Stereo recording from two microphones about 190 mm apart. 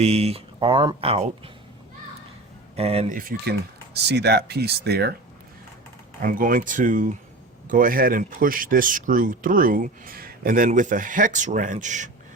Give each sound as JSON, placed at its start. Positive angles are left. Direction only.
{"t": 0.0, "sound": "speech", "side_deg": -35}
{"t": 2.7, "sound": "speech", "side_deg": -30}
{"t": 3.9, "sound": "speech", "side_deg": -60}
{"t": 6.2, "sound": "speech", "side_deg": -45}